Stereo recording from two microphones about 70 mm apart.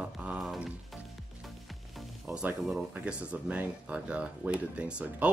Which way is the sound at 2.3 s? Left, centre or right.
Right.